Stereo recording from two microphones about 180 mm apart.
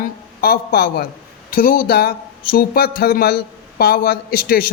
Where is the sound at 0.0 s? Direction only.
55° left (ahead or behind).